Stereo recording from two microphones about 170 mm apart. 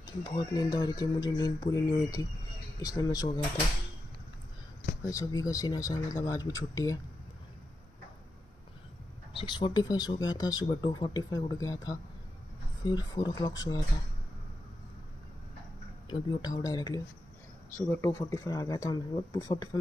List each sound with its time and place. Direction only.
0.0 s speech: 25° left (ahead or behind)
5.0 s speech: 20° left (ahead or behind)
9.3 s speech: 25° left (ahead or behind)
16.1 s speech: 25° left (ahead or behind)
17.7 s speech: 10° left (ahead or behind)